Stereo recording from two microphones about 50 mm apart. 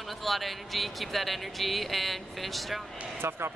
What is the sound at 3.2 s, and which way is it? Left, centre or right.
Speech, right.